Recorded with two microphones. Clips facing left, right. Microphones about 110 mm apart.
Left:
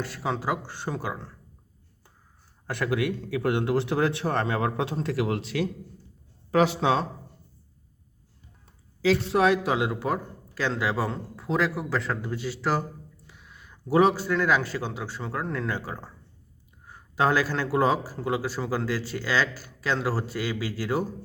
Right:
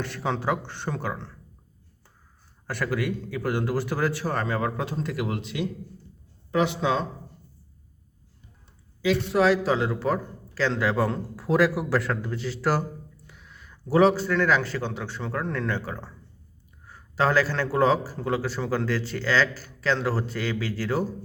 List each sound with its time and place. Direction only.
0.0 s a man's voice: 5° left (ahead or behind)
2.6 s a man's voice: 20° left (ahead or behind)
6.6 s speech: 35° left (ahead or behind)
9.0 s a man's voice: 30° left (ahead or behind); by 21.1 s 15° left (ahead or behind)